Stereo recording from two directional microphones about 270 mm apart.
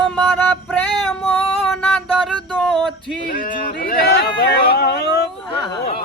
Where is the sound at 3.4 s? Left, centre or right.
Left.